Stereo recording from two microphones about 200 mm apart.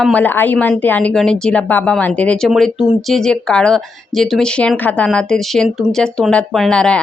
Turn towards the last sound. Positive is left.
turn(degrees=5)  # may be behind; listen again after turning